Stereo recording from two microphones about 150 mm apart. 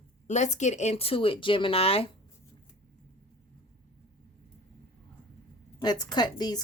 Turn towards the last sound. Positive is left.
turn(degrees=25)  # may be behind; listen again after turning